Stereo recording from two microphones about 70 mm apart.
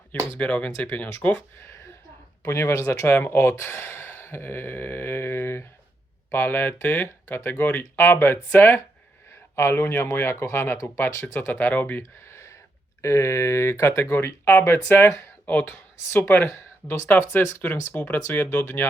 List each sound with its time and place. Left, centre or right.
0.3 s speech: centre
2.4 s speech: left
11.1 s speech: left
11.3 s speech: left
12.3 s a sound: left
13.0 s speech: left
14.6 s speech: left